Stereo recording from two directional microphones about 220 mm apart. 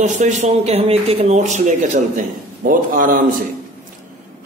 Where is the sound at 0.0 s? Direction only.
35° right (ahead or behind).